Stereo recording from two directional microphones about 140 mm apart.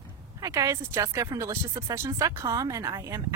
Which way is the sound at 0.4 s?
25° right (ahead or behind).